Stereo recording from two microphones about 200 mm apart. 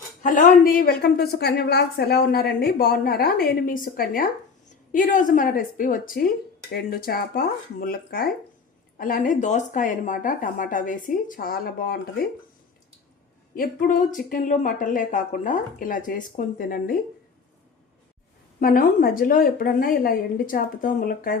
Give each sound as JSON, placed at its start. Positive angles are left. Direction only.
{"t": 0.2, "sound": "a woman's voice", "side_deg": 40}
{"t": 13.6, "sound": "speech", "side_deg": 40}
{"t": 18.6, "sound": "a woman's voice", "side_deg": 45}